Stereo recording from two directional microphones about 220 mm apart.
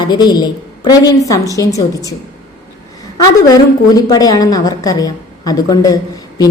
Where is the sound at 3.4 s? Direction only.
15° left (ahead or behind).